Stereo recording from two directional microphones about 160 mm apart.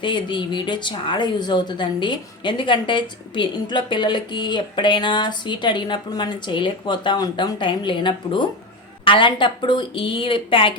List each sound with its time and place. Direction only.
0.0 s speech: 30° left (ahead or behind)